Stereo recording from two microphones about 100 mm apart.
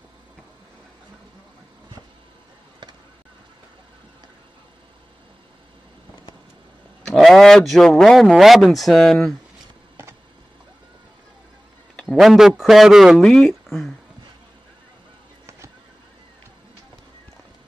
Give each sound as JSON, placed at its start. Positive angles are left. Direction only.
{"t": 7.1, "sound": "speech", "side_deg": 5}
{"t": 10.0, "sound": "a sound", "side_deg": -25}
{"t": 12.0, "sound": "speech", "side_deg": 0}